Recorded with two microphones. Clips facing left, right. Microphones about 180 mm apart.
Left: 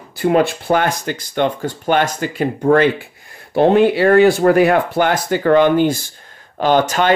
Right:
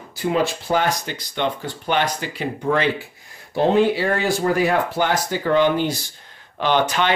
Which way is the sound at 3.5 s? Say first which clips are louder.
Left 5 dB; 60° left (ahead or behind).